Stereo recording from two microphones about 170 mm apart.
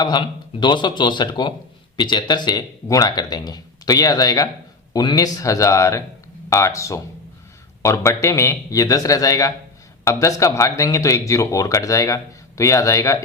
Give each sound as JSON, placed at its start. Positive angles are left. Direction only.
{"t": 0.0, "sound": "speech", "side_deg": 25}